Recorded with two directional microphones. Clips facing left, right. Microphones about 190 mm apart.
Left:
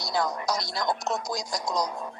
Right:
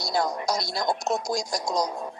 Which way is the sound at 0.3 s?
15° right (ahead or behind).